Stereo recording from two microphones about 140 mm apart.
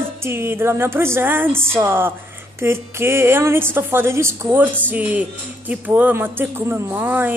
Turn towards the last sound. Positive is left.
turn(degrees=-15)  # may be behind; listen again after turning